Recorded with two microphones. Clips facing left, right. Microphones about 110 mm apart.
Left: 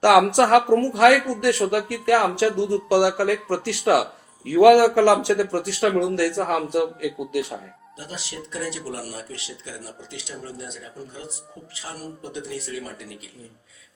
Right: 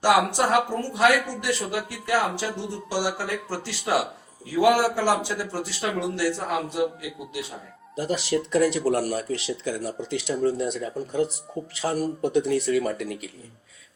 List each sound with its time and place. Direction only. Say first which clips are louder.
0.0 s speech: left 5 dB; 80° left
8.0 s speech: right 11 dB; 70° right (ahead or behind)